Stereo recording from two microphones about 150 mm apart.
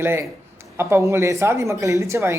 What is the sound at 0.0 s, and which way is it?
Speech, 15° right (ahead or behind).